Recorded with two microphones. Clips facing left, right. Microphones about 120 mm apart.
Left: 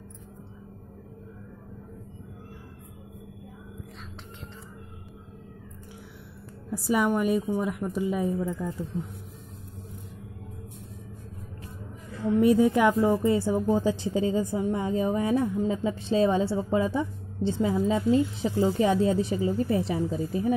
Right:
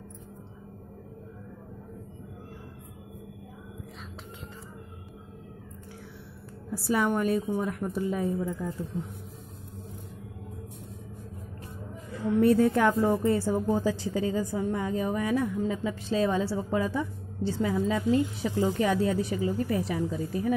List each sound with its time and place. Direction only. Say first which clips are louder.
6.7 s a woman's voice: left 2 dB; 15° left (ahead or behind)
12.4 s a woman's voice: left 1 dB; 10° left (ahead or behind)